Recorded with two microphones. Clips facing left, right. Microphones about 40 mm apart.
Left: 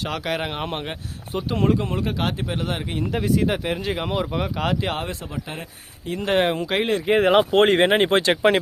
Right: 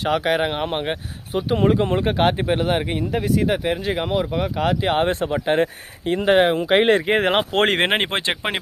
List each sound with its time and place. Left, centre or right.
0.0 s speech: centre
1.8 s speech: right
2.7 s speech: right
3.1 s speech: centre
4.9 s speech: right
6.3 s speech: centre
7.0 s speech: right
7.5 s speech: right
7.8 s speech: right